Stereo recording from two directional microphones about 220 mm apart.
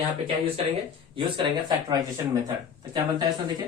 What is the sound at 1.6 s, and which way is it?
Speech, 15° right (ahead or behind).